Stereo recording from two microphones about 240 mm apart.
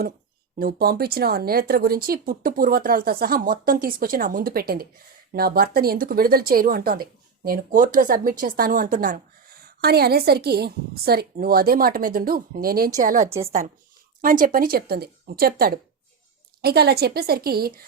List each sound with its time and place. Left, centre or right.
0.6 s speech: right
13.2 s a woman's voice: centre
14.2 s speech: right